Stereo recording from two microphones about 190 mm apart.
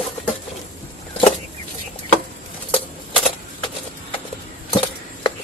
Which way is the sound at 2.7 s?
30° left (ahead or behind).